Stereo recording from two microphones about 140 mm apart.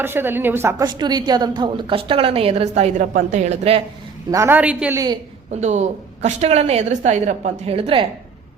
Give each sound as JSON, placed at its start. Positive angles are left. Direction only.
{"t": 0.0, "sound": "a woman's voice", "side_deg": -15}
{"t": 0.8, "sound": "a woman's voice", "side_deg": -30}
{"t": 4.3, "sound": "a woman's voice", "side_deg": -20}
{"t": 5.5, "sound": "a woman's voice", "side_deg": -55}